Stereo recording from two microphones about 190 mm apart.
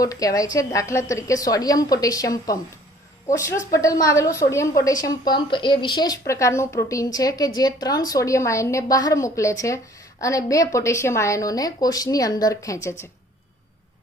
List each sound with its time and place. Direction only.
0.0 s speech: 20° left (ahead or behind)